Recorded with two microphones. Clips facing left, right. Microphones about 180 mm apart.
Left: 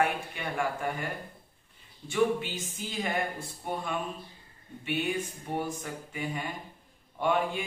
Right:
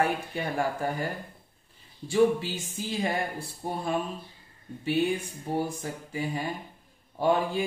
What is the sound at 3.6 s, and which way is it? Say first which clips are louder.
Speech: right 1 dB; 35° right (ahead or behind).